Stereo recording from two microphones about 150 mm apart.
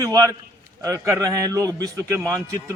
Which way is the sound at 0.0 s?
25° right (ahead or behind).